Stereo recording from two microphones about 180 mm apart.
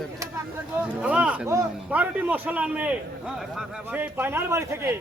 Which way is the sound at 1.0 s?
5° right (ahead or behind).